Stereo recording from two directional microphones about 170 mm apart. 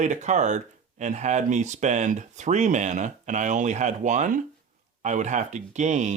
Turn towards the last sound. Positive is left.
turn(degrees=-45)  # may be behind; listen again after turning